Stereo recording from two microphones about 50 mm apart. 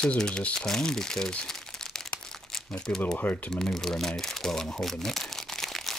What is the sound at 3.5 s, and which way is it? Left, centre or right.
Crumpling, centre.